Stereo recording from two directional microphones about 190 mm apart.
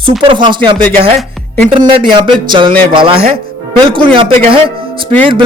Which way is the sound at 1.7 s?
25° right (ahead or behind).